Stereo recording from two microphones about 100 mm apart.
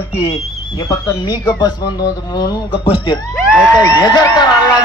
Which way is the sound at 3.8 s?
40° left (ahead or behind).